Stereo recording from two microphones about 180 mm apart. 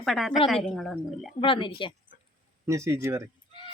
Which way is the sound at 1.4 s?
25° left (ahead or behind).